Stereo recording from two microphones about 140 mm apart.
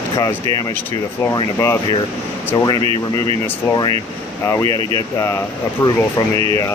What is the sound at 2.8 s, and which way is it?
Speech, 40° right (ahead or behind).